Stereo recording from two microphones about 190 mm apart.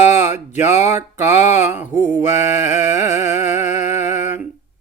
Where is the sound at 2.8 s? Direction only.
40° left (ahead or behind).